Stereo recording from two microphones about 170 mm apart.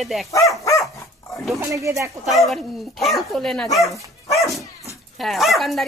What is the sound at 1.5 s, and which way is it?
Speech, 20° right (ahead or behind).